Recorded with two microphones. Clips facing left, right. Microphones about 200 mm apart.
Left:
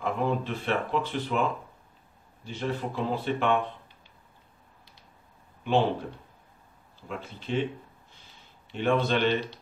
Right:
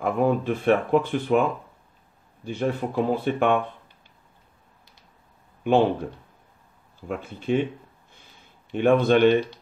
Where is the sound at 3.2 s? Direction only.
50° right (ahead or behind).